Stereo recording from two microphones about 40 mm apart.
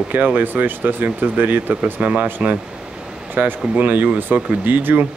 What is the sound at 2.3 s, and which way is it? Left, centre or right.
Speech, right.